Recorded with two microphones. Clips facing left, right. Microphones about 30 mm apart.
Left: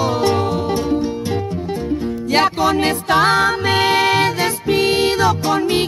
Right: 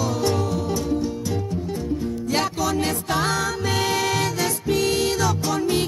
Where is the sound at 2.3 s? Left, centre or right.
Left.